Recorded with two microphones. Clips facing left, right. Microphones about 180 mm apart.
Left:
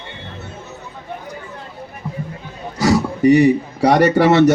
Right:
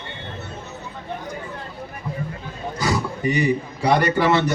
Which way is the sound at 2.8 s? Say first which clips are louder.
Left 9 dB; 75° left (ahead or behind).